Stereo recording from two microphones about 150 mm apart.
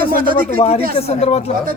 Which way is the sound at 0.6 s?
40° left (ahead or behind).